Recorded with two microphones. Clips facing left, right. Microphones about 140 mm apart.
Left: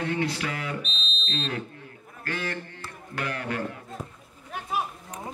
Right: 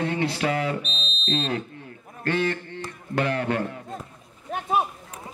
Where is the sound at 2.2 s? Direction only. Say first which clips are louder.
Right 8 dB; 25° right (ahead or behind).